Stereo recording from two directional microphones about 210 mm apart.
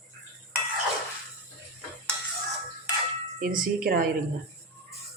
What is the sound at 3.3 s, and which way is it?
Speech, 45° right (ahead or behind).